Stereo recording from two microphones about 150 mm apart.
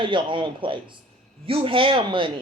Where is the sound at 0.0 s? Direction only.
35° right (ahead or behind).